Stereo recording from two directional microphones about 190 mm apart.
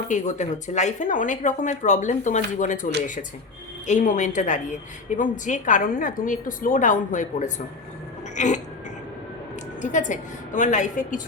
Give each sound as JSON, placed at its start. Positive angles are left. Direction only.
{"t": 0.1, "sound": "speech", "side_deg": 40}
{"t": 3.8, "sound": "a woman's voice", "side_deg": 40}
{"t": 9.8, "sound": "speech", "side_deg": 40}